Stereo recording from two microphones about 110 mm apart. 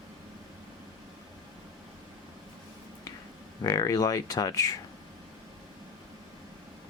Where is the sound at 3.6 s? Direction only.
35° left (ahead or behind).